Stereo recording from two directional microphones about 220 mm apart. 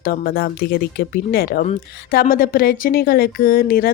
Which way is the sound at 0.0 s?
45° left (ahead or behind).